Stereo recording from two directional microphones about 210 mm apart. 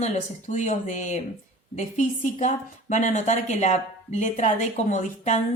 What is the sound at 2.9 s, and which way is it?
Speech, 35° left (ahead or behind).